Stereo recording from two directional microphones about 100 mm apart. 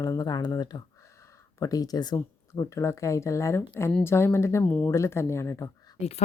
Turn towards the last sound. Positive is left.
turn(degrees=30)  # may be behind; listen again after turning